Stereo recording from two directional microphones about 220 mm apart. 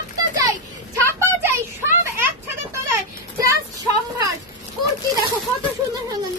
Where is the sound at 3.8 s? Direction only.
15° right (ahead or behind).